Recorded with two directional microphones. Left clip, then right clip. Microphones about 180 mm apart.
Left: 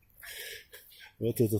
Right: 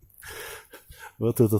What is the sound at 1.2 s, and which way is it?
Speech, 40° right (ahead or behind).